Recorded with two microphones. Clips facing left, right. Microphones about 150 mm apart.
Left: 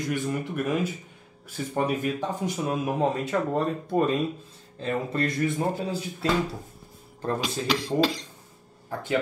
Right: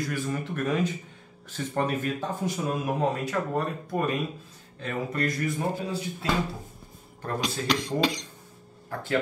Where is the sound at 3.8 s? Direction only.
30° left (ahead or behind).